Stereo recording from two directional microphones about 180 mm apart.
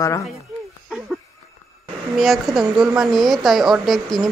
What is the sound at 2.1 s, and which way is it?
Speech, centre (ahead or behind).